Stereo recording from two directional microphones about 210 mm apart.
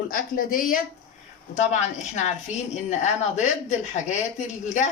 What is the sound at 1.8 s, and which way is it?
A woman's voice, 35° left (ahead or behind).